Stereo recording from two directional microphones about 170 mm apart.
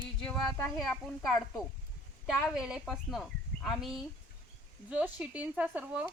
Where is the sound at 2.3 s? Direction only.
Centre (ahead or behind).